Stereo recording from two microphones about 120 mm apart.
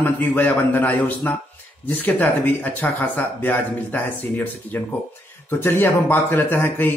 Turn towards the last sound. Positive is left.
turn(degrees=15)  # may be behind; listen again after turning